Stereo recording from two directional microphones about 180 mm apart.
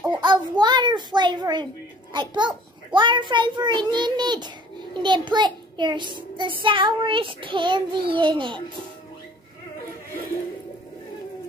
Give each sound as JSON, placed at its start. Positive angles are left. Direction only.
{"t": 0.2, "sound": "a child's voice", "side_deg": -25}